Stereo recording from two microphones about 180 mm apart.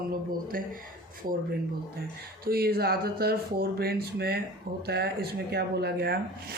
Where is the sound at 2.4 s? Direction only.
55° right (ahead or behind).